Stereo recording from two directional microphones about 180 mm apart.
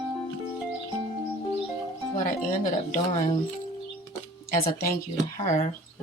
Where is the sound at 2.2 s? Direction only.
45° left (ahead or behind).